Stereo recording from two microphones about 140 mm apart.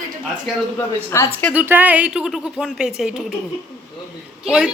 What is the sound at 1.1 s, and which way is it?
Speech, 20° left (ahead or behind).